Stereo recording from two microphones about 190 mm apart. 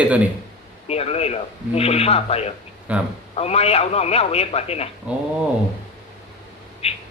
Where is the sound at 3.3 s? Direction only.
35° left (ahead or behind).